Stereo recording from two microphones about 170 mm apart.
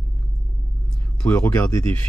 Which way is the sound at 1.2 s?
10° left (ahead or behind).